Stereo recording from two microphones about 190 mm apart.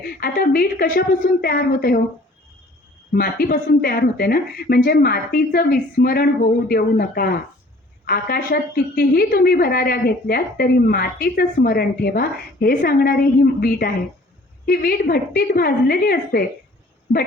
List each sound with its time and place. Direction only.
0.2 s a woman's voice: 50° left (ahead or behind)
3.2 s a woman's voice: 50° left (ahead or behind)